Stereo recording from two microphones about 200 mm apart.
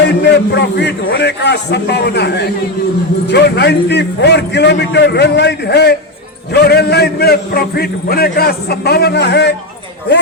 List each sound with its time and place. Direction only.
0.2 s a man's voice: 60° left (ahead or behind)